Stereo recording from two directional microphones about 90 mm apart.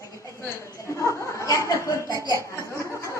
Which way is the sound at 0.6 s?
35° left (ahead or behind).